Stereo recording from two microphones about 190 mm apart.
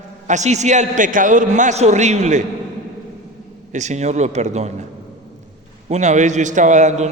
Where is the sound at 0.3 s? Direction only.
40° right (ahead or behind).